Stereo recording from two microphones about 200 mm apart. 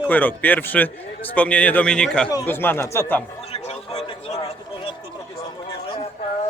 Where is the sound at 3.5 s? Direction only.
35° left (ahead or behind).